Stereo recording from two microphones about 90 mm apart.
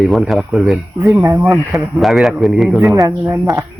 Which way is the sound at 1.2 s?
35° right (ahead or behind).